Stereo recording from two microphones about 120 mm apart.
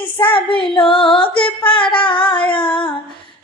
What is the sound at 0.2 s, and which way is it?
Female singing, 45° left (ahead or behind).